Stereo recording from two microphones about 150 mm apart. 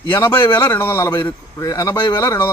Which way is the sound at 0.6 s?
15° left (ahead or behind).